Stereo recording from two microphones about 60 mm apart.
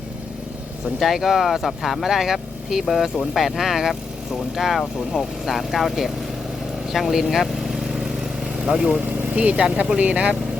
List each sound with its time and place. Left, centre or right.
0.9 s speech: centre
6.9 s vehicle: centre
8.6 s speech: centre
9.0 s speech: right